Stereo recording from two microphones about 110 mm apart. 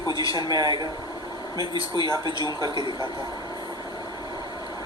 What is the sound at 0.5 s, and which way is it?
Speech, 35° right (ahead or behind).